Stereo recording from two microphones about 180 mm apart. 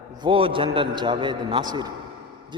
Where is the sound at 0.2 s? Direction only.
30° right (ahead or behind).